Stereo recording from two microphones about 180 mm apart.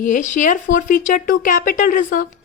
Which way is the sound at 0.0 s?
45° left (ahead or behind).